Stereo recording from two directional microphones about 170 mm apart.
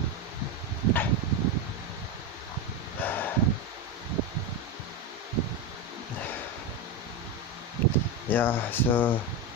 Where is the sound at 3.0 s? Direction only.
10° left (ahead or behind).